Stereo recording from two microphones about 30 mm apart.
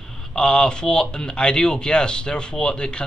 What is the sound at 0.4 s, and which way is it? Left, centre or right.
Speech, left.